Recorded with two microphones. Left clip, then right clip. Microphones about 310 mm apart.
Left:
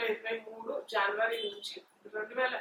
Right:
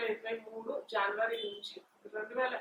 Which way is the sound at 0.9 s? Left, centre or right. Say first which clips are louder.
Left 3 dB; centre.